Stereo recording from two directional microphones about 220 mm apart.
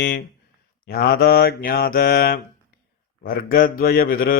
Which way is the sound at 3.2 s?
40° left (ahead or behind).